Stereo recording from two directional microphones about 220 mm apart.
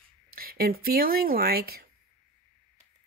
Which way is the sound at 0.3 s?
40° right (ahead or behind).